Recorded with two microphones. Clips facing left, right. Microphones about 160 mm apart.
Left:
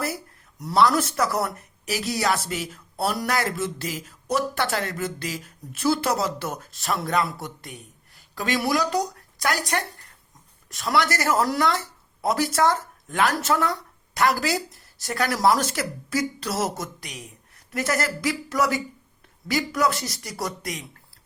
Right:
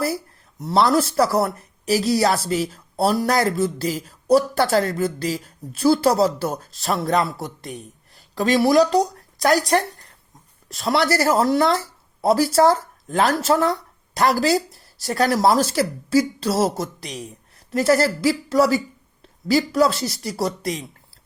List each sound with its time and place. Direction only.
0.6 s speech: 30° right (ahead or behind)